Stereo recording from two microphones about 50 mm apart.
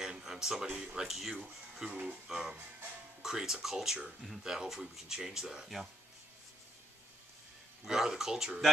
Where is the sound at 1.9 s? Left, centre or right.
Right.